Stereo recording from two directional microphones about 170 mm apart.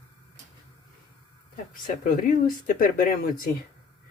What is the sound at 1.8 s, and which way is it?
Speech, 55° left (ahead or behind).